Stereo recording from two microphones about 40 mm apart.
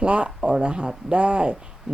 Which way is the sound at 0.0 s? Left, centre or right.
Right.